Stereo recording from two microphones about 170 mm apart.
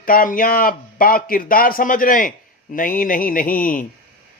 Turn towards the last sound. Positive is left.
turn(degrees=50)  # may be behind; listen again after turning